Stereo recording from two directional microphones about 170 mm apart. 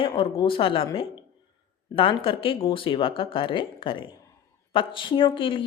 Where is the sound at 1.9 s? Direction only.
30° left (ahead or behind).